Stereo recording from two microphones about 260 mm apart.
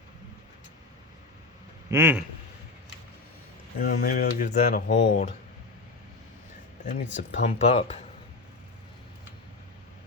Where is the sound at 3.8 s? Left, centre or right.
Left.